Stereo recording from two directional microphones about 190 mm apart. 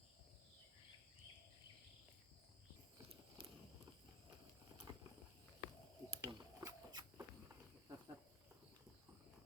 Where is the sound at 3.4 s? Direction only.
30° right (ahead or behind).